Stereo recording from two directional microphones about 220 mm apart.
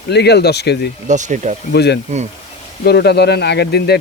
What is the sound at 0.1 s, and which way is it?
Speech, 50° left (ahead or behind).